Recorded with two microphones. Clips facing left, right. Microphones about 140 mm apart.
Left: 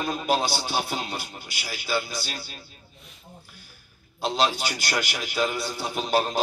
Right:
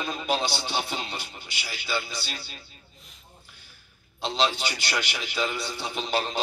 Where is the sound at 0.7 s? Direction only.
10° left (ahead or behind).